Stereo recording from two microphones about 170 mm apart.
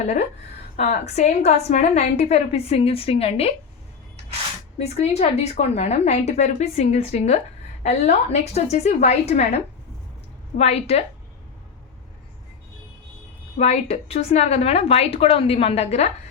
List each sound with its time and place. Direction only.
0.0 s a woman's voice: 40° left (ahead or behind)
4.8 s a woman's voice: 40° left (ahead or behind)
10.6 s a woman's voice: 40° left (ahead or behind)
13.6 s a woman's voice: 40° left (ahead or behind)